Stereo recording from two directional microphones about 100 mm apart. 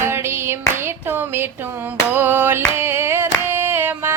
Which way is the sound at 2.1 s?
20° right (ahead or behind).